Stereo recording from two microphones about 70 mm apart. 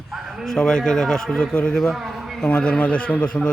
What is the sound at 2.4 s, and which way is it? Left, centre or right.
A man's voice, centre.